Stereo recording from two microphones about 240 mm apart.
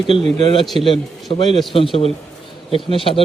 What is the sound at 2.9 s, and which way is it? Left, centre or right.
Speech, left.